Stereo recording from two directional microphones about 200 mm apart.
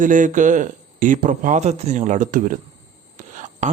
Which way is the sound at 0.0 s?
40° right (ahead or behind).